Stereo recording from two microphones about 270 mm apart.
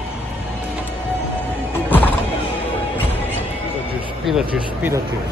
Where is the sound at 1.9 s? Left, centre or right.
Centre.